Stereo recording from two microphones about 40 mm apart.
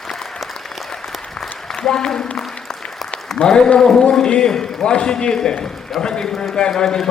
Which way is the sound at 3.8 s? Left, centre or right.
Centre.